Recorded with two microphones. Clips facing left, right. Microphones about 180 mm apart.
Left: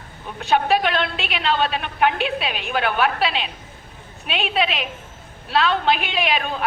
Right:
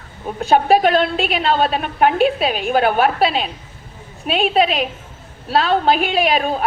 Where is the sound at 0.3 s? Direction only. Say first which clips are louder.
Right 5 dB; 40° right (ahead or behind).